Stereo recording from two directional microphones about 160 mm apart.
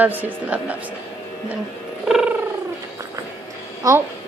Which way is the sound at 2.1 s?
5° right (ahead or behind).